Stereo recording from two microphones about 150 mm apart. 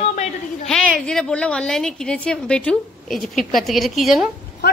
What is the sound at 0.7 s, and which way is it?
A woman's voice, 5° left (ahead or behind).